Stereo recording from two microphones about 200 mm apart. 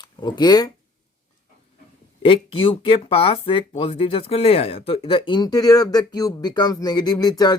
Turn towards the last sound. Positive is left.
turn(degrees=20)  # may be behind; listen again after turning